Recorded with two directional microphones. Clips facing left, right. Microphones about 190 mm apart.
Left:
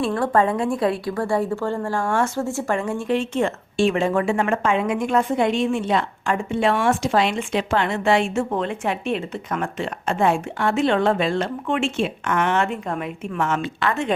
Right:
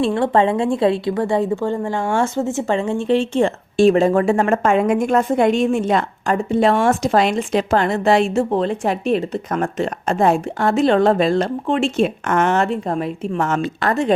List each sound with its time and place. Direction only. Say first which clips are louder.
0.0 s a woman's voice: right 3 dB; 25° right (ahead or behind)